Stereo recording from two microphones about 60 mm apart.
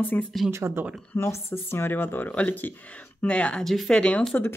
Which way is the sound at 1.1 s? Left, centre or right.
Left.